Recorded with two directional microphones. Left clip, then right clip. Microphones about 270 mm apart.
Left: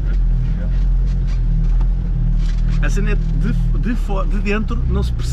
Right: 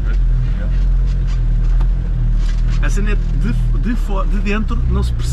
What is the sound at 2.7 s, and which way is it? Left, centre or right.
Speech, centre.